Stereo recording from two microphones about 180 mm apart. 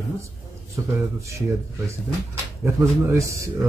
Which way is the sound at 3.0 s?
15° right (ahead or behind).